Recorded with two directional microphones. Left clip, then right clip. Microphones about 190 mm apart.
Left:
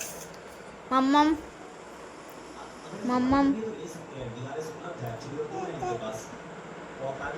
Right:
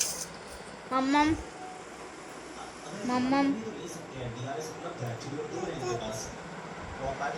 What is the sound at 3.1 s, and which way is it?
Speech, 15° left (ahead or behind).